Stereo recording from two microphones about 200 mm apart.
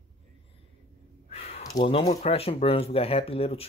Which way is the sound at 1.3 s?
30° left (ahead or behind).